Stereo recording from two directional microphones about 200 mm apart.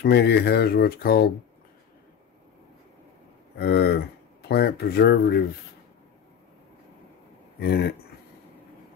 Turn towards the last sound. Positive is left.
turn(degrees=55)  # may be behind; listen again after turning